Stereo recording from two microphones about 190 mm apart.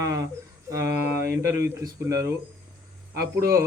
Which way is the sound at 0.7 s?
15° right (ahead or behind).